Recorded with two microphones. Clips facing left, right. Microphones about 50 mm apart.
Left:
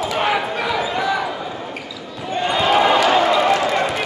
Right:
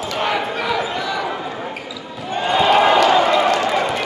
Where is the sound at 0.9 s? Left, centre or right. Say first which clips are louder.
Left 3 dB; centre.